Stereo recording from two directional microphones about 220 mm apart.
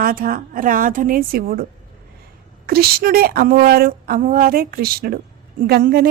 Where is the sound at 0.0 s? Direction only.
40° right (ahead or behind).